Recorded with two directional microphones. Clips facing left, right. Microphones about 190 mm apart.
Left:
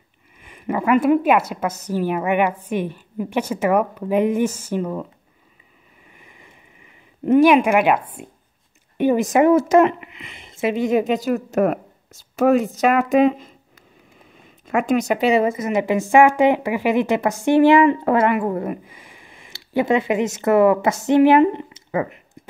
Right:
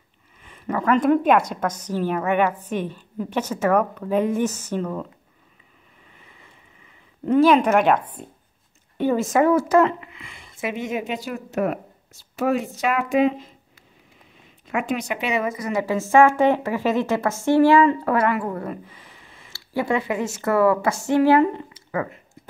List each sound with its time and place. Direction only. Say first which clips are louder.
0.4 s a woman's voice: left 2 dB; 10° left (ahead or behind)
6.1 s boat: left 3 dB; 15° left (ahead or behind)
7.2 s a woman's voice: left 3 dB; 15° left (ahead or behind); by 13.5 s 45° left (ahead or behind)
14.7 s a woman's voice: left 6 dB; 45° left (ahead or behind); by 22.4 s 20° left (ahead or behind)